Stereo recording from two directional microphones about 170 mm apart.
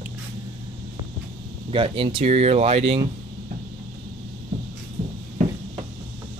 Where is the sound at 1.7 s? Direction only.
30° right (ahead or behind).